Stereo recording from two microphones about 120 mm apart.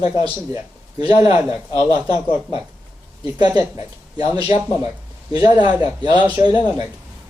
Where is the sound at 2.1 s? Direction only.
50° left (ahead or behind).